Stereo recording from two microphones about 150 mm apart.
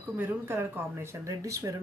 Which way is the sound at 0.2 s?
15° right (ahead or behind).